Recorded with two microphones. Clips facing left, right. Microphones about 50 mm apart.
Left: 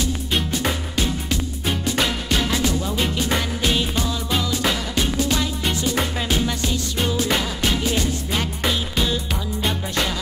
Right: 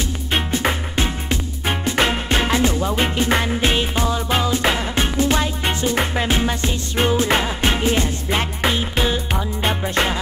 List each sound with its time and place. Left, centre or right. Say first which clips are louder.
0.0 s music: right 1 dB; right